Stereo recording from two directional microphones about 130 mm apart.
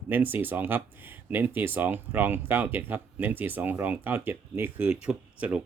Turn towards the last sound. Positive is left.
turn(degrees=-10)  # may be behind; listen again after turning